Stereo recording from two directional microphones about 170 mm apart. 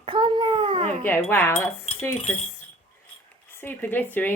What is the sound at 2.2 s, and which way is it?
Speech, 40° left (ahead or behind).